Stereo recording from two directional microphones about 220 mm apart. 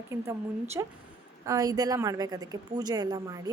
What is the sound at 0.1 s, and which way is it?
Speech, 10° right (ahead or behind).